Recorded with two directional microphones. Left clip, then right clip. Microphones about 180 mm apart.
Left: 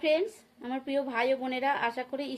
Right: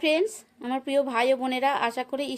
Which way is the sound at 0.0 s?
55° right (ahead or behind).